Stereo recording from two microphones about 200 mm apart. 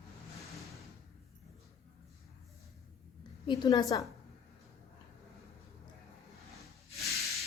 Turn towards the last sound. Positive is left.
turn(degrees=0)  # may be behind; listen again after turning